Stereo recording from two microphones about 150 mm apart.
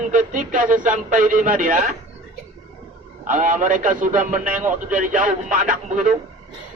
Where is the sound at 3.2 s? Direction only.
60° right (ahead or behind).